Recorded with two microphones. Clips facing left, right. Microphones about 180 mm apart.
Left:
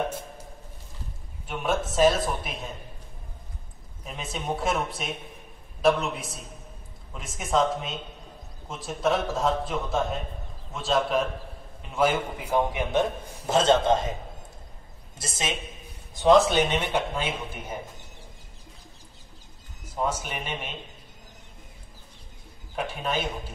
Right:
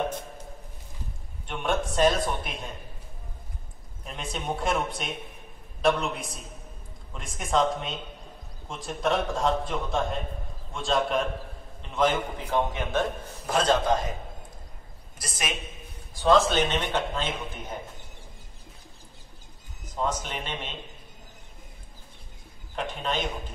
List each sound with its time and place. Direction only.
1.5 s a man's voice: 5° left (ahead or behind)
4.0 s a man's voice: centre (ahead or behind)
13.5 s a man's voice: 25° left (ahead or behind)
15.1 s a man's voice: 25° left (ahead or behind); by 17.7 s 10° left (ahead or behind)
19.8 s speech: 10° left (ahead or behind)
22.8 s a man's voice: 10° left (ahead or behind)